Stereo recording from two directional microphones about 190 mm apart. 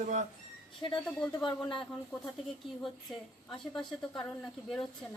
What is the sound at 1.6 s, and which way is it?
Speech, 5° left (ahead or behind).